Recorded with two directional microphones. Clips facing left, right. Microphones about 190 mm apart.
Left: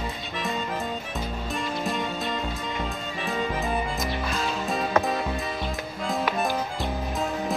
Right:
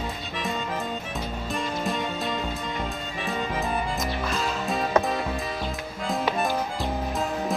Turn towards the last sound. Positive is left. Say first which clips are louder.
# right 1 dB
turn(degrees=0)  # may be behind; listen again after turning